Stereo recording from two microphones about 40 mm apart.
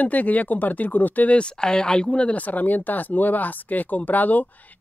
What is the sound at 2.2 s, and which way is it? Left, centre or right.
Speech, left.